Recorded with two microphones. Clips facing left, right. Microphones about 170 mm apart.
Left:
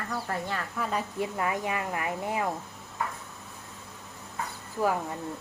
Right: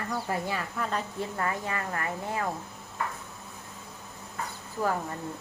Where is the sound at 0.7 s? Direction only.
10° left (ahead or behind).